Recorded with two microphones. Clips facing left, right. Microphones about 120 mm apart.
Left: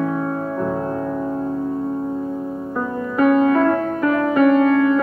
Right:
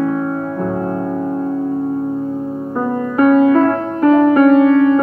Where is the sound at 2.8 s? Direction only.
40° right (ahead or behind).